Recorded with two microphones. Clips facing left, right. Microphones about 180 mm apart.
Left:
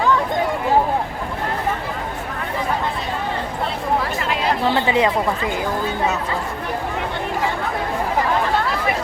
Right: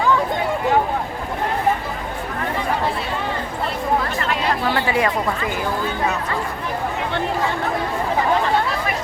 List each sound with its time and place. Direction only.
4.6 s speech: 25° left (ahead or behind)